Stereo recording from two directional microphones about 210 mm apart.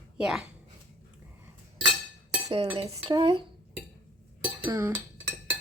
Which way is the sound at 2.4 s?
25° right (ahead or behind).